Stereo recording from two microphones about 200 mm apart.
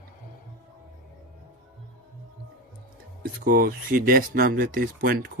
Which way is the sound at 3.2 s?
45° right (ahead or behind).